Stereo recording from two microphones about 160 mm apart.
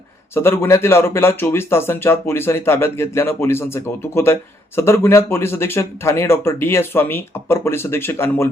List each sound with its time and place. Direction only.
0.3 s speech: 15° left (ahead or behind)